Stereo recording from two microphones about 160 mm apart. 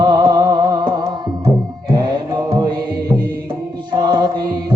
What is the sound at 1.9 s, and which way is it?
Music, 25° right (ahead or behind).